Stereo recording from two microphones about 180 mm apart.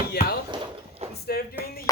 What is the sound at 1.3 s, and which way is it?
Speech, 55° left (ahead or behind).